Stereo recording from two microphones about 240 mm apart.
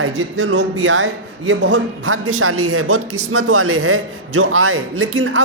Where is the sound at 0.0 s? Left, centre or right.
Right.